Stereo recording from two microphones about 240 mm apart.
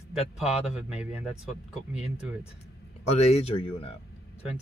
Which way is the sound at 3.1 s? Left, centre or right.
Left.